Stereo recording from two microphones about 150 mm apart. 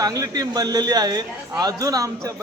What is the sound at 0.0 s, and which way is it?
A man's voice, 25° right (ahead or behind).